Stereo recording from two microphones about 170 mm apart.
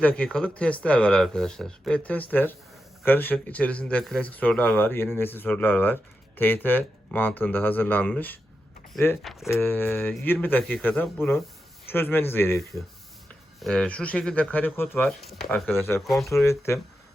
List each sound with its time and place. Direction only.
0.0 s speech: 5° left (ahead or behind)
9.5 s speech: 10° left (ahead or behind)
13.6 s speech: 5° left (ahead or behind)
16.0 s speech: centre (ahead or behind)
16.3 s speech: 15° left (ahead or behind)